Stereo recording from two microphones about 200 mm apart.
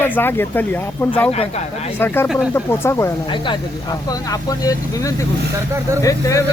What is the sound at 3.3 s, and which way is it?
Speech, 25° left (ahead or behind).